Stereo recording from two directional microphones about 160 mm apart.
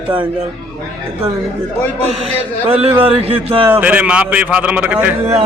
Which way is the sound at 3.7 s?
10° right (ahead or behind).